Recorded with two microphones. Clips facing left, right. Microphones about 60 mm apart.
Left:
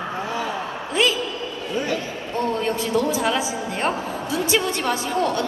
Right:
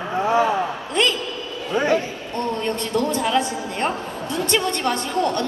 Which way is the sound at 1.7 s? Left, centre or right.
Right.